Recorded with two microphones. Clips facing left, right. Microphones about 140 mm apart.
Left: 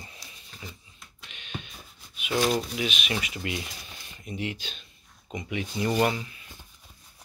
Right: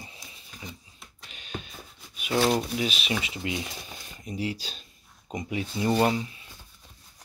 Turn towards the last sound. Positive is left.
turn(degrees=-25)  # may be behind; listen again after turning